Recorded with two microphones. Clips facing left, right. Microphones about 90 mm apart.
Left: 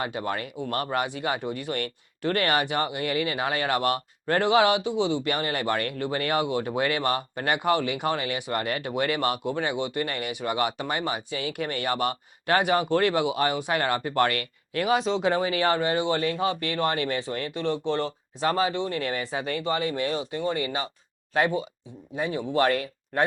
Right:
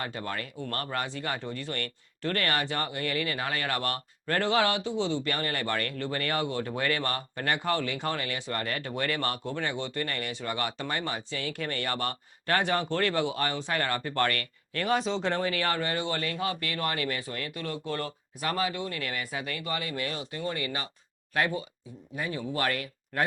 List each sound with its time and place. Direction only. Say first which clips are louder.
0.0 s speech: left 5 dB; 20° left (ahead or behind)